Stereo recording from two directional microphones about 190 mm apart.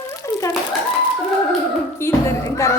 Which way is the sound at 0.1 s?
15° left (ahead or behind).